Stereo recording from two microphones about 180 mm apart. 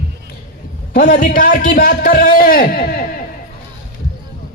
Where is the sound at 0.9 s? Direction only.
50° left (ahead or behind).